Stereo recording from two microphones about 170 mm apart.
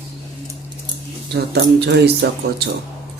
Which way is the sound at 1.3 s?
85° right.